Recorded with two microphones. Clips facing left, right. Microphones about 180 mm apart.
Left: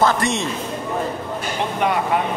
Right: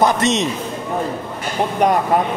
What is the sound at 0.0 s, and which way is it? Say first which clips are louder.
Speech: right 3 dB; 20° right (ahead or behind).